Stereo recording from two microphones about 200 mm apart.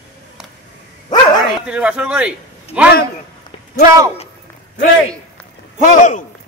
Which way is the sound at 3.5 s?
30° left (ahead or behind).